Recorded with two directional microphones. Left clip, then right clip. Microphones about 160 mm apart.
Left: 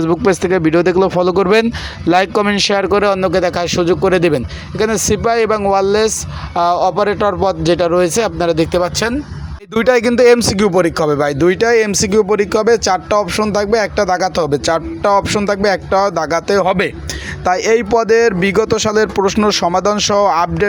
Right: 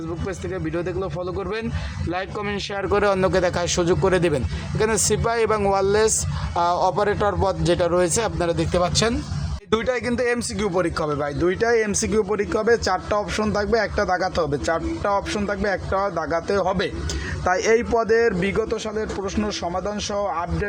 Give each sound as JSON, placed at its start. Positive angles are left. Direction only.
{"t": 0.0, "sound": "speech", "side_deg": 50}
{"t": 2.9, "sound": "speech", "side_deg": 30}
{"t": 11.5, "sound": "speech", "side_deg": 25}